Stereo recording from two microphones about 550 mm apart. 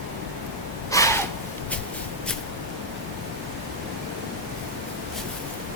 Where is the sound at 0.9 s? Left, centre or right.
Centre.